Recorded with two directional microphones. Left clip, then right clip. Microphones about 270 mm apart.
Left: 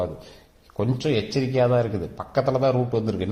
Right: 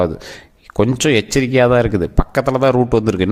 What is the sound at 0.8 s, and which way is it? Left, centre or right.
Speech, right.